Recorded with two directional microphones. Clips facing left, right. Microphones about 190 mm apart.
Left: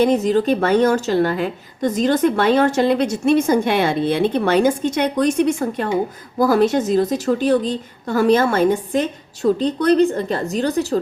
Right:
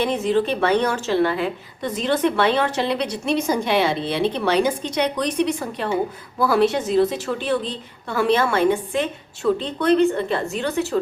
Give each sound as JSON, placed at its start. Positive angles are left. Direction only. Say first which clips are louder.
{"t": 0.0, "sound": "a woman's voice", "louder": "left 4 dB", "side_deg": 40}